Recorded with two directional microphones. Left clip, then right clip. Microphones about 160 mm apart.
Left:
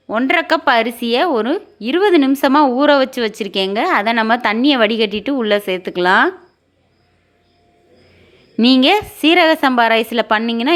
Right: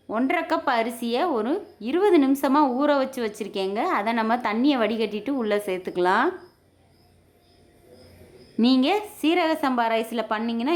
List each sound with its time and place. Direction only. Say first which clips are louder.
0.1 s a woman's voice: left 9 dB; 20° left (ahead or behind)
8.6 s a woman's voice: left 10 dB; 25° left (ahead or behind)